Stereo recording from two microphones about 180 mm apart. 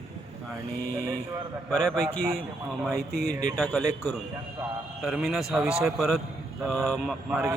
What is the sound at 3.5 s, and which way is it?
Speech, centre (ahead or behind).